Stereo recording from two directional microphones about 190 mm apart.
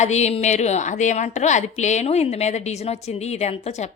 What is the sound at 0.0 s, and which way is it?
A woman's voice, 35° left (ahead or behind).